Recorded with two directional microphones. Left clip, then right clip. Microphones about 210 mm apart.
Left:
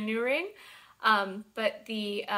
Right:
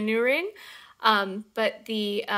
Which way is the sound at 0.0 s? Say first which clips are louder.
Right 6 dB; 45° right (ahead or behind).